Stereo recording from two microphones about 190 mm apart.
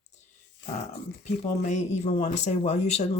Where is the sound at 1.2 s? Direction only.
35° left (ahead or behind).